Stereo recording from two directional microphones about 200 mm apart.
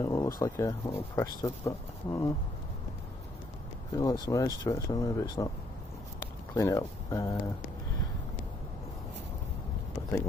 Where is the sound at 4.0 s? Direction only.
20° left (ahead or behind).